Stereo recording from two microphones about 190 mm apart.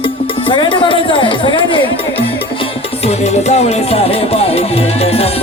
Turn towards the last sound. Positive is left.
turn(degrees=30)  # may be behind; listen again after turning